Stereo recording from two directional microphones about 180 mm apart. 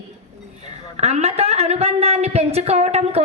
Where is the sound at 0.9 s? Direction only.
35° right (ahead or behind).